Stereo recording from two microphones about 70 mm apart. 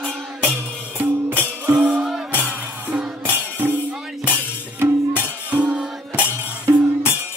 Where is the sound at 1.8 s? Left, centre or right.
Centre.